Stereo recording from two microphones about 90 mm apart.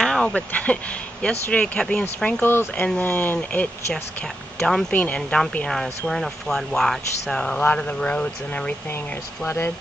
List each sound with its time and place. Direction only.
0.0 s speech: 10° left (ahead or behind)
2.4 s speech: 25° left (ahead or behind)
4.6 s speech: 5° left (ahead or behind)
5.7 s speech: 5° left (ahead or behind)